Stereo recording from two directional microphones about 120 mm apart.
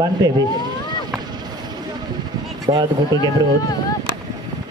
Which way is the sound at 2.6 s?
40° right (ahead or behind).